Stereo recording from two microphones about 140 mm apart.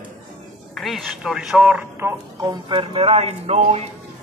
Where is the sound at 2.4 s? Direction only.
35° right (ahead or behind).